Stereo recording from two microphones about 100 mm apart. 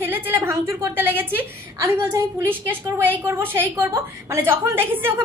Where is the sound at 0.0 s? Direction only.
20° right (ahead or behind).